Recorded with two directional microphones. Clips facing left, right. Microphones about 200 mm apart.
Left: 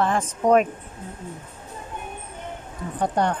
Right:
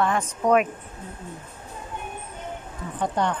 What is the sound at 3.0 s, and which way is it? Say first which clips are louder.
Speech: left 2 dB; 40° left (ahead or behind).